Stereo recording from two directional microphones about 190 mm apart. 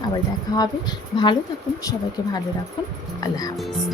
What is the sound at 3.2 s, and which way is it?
Speech, 20° left (ahead or behind).